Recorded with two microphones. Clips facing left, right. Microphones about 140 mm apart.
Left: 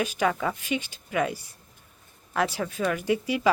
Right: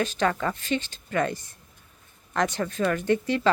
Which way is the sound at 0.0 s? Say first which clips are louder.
Right 1 dB; 10° left (ahead or behind).